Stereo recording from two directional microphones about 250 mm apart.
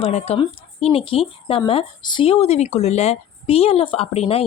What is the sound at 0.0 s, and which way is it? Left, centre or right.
Speech, left.